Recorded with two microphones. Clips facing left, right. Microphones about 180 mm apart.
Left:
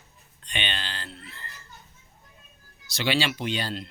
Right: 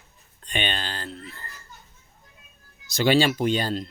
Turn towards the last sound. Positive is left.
turn(degrees=-45)  # may be behind; listen again after turning